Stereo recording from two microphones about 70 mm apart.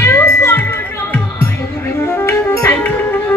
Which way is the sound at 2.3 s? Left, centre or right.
Left.